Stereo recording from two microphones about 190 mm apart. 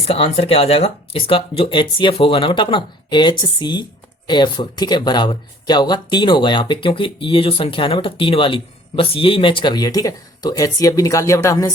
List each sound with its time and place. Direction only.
0.0 s speech: 30° left (ahead or behind)